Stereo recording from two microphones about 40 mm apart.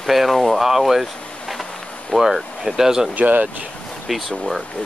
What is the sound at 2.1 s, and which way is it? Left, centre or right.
Speech, centre.